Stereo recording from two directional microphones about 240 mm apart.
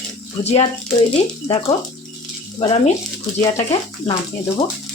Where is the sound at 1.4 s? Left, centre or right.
Left.